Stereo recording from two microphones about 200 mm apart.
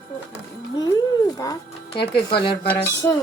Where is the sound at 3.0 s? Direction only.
10° left (ahead or behind).